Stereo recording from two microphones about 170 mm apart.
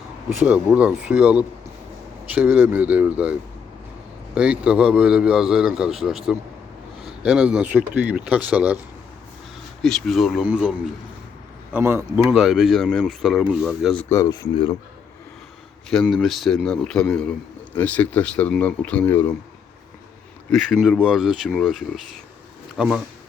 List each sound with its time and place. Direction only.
0.3 s speech: 10° right (ahead or behind)
4.4 s a man's voice: 5° right (ahead or behind)
9.8 s a man's voice: centre (ahead or behind); by 12.3 s 15° right (ahead or behind)
12.3 s a man's voice: centre (ahead or behind)
14.0 s speech: 20° left (ahead or behind)
16.0 s a man's voice: centre (ahead or behind)
20.5 s a man's voice: centre (ahead or behind)